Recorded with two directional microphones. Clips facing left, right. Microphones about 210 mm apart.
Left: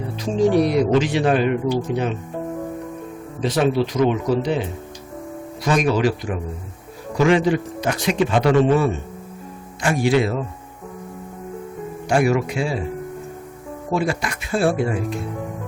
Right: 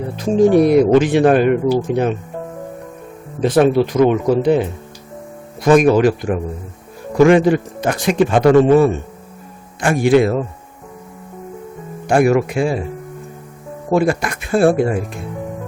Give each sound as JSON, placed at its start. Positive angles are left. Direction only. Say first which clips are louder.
{"t": 0.2, "sound": "a man's voice", "louder": "right 5 dB", "side_deg": -50}
{"t": 3.4, "sound": "a man's voice", "louder": "right 6 dB", "side_deg": -55}
{"t": 5.6, "sound": "a man's voice", "louder": "right 8 dB", "side_deg": -50}
{"t": 12.0, "sound": "a man's voice", "louder": "right 5 dB", "side_deg": -50}
{"t": 13.9, "sound": "a man's voice", "louder": "right 7 dB", "side_deg": -50}